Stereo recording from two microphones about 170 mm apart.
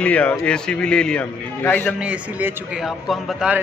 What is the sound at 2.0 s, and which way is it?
Speech, 10° right (ahead or behind).